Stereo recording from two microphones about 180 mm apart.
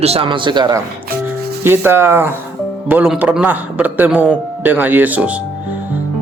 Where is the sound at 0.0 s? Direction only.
30° right (ahead or behind).